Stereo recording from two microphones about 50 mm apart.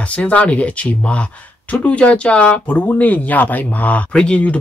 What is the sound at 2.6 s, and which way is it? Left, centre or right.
Speech, left.